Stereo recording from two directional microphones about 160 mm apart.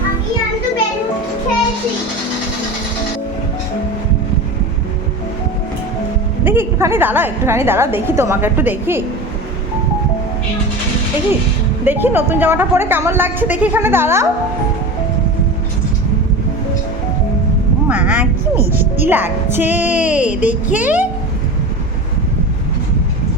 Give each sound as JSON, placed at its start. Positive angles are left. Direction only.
{"t": 6.4, "sound": "a woman's voice", "side_deg": -15}
{"t": 11.9, "sound": "a woman's voice", "side_deg": -10}
{"t": 17.8, "sound": "a woman's voice", "side_deg": -10}
{"t": 18.5, "sound": "speech", "side_deg": -70}
{"t": 18.9, "sound": "a woman's voice", "side_deg": -15}